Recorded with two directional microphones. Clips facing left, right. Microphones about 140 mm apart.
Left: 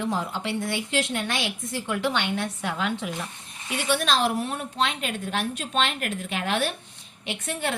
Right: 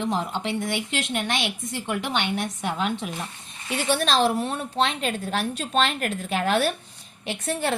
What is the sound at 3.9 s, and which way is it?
A woman's voice, 30° right (ahead or behind).